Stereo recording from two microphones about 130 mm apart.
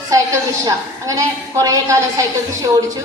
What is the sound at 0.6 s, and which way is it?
A woman's voice, 25° right (ahead or behind).